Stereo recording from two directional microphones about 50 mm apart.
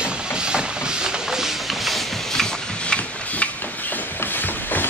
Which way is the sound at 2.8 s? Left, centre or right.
Left.